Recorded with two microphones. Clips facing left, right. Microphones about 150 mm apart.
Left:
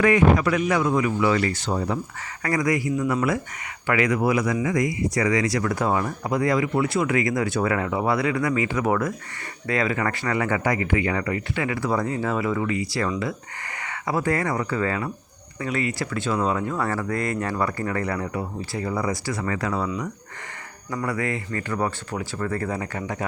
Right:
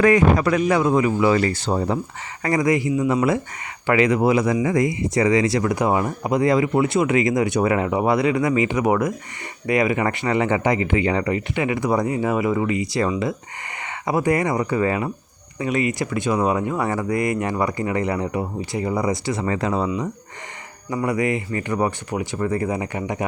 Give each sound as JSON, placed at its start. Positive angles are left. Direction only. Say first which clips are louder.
{"t": 0.0, "sound": "speech", "louder": "right 2 dB", "side_deg": -35}
{"t": 20.9, "sound": "speech", "louder": "right 5 dB", "side_deg": -15}